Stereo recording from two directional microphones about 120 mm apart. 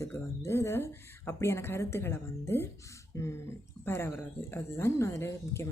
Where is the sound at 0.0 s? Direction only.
20° left (ahead or behind).